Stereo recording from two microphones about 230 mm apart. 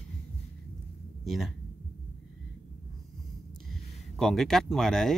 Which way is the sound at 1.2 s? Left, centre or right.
Centre.